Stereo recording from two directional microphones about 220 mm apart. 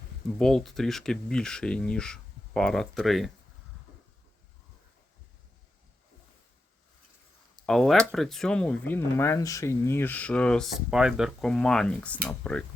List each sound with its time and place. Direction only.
0.3 s speech: centre (ahead or behind)
7.7 s speech: centre (ahead or behind)